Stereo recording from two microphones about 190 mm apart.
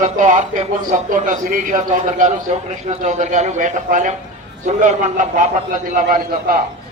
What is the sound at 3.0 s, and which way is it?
A man's voice, 40° right (ahead or behind).